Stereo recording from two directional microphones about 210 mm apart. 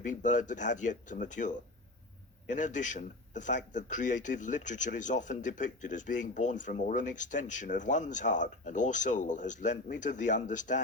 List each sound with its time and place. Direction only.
0.0 s speech: 35° left (ahead or behind)